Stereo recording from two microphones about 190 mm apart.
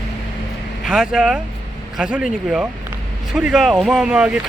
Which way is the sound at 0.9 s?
5° right (ahead or behind).